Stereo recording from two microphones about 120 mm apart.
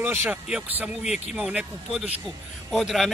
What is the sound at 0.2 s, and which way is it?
A man's voice, 5° right (ahead or behind).